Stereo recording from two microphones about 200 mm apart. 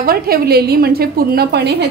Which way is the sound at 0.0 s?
50° right (ahead or behind).